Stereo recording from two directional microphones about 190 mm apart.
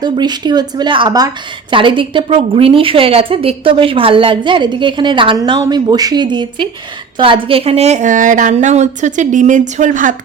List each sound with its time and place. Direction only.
0.0 s a woman's voice: 20° right (ahead or behind); by 10.2 s 45° right (ahead or behind)